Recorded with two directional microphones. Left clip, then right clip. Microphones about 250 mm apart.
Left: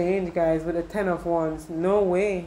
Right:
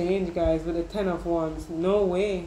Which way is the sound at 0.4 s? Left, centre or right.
Left.